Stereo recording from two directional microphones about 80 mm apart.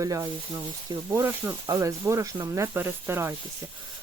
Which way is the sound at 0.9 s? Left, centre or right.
Right.